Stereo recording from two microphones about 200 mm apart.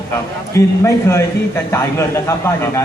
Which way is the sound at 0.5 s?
15° left (ahead or behind).